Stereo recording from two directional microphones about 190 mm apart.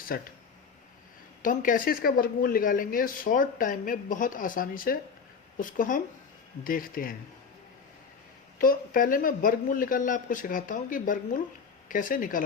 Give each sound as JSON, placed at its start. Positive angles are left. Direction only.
{"t": 0.1, "sound": "speech", "side_deg": 50}
{"t": 1.4, "sound": "speech", "side_deg": 45}
{"t": 8.5, "sound": "speech", "side_deg": 50}